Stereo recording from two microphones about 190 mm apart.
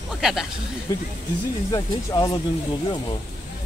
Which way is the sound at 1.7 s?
20° left (ahead or behind).